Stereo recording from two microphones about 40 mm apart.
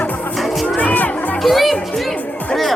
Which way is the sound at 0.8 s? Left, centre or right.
Left.